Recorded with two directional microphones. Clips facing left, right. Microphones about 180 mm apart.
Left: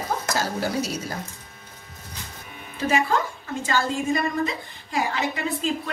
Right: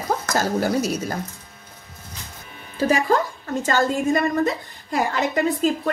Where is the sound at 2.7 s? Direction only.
40° right (ahead or behind).